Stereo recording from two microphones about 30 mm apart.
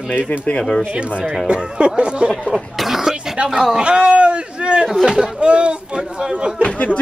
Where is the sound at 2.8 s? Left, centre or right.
Centre.